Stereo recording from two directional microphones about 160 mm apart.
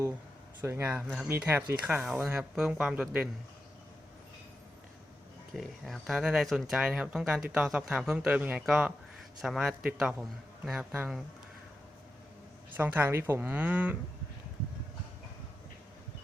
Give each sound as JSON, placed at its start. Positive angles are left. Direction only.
{"t": 0.6, "sound": "speech", "side_deg": -15}
{"t": 5.5, "sound": "speech", "side_deg": 0}
{"t": 12.7, "sound": "speech", "side_deg": -10}